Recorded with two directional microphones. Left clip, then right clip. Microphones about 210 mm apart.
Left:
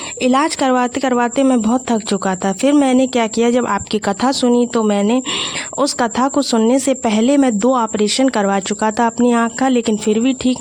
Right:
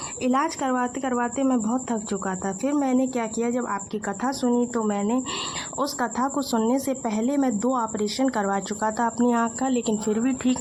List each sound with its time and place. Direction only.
0.2 s speech: 50° left (ahead or behind)